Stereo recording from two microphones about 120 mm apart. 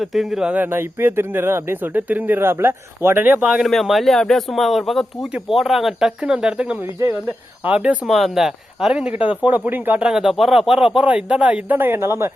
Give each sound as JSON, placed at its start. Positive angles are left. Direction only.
{"t": 0.0, "sound": "speech", "side_deg": 0}
{"t": 3.7, "sound": "speech", "side_deg": 0}
{"t": 6.8, "sound": "speech", "side_deg": -20}
{"t": 9.1, "sound": "speech", "side_deg": 45}
{"t": 9.6, "sound": "speech", "side_deg": -15}